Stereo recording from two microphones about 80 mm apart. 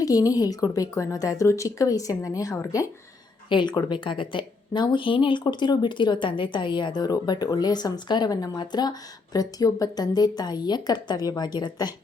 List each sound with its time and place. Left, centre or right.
0.0 s a woman's voice: left
3.5 s a woman's voice: left